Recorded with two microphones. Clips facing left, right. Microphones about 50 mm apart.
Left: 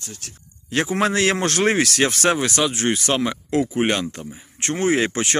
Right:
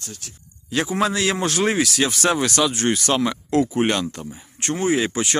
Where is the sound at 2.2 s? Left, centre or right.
Left.